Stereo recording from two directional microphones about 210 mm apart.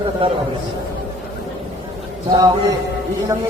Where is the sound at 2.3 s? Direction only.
20° right (ahead or behind).